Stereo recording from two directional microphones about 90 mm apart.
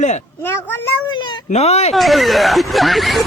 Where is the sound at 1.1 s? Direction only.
60° left (ahead or behind).